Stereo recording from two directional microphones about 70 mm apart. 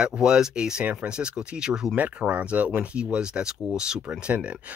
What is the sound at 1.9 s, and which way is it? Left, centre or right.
Speech, right.